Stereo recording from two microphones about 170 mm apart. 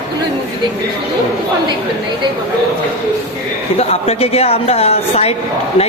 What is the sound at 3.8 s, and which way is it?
Speech, 35° left (ahead or behind).